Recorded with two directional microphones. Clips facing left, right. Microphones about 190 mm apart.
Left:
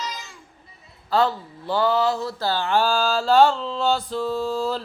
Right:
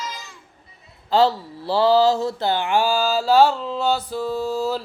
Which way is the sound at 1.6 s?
30° right (ahead or behind).